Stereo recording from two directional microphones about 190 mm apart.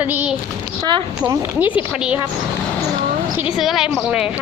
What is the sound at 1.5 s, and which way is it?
Speech, 10° right (ahead or behind).